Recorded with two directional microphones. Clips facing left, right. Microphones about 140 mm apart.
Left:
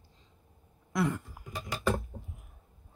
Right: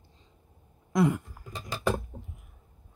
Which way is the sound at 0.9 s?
15° right (ahead or behind).